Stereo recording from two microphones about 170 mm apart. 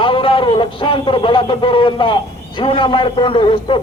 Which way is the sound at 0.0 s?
30° left (ahead or behind).